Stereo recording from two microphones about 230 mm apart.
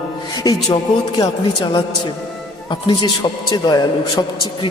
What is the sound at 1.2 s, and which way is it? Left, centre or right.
A man's voice, centre.